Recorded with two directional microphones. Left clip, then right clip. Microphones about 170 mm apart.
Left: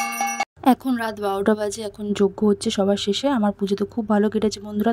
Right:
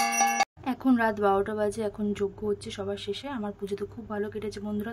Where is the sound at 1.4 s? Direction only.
45° left (ahead or behind).